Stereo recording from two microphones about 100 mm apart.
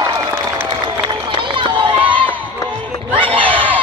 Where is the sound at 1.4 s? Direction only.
55° right (ahead or behind).